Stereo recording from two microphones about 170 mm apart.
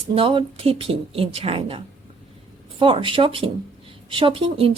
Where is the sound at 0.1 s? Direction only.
30° right (ahead or behind).